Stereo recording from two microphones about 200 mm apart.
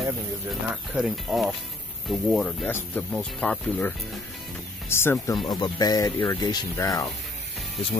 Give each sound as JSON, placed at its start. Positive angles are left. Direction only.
{"t": 0.5, "sound": "speech", "side_deg": 0}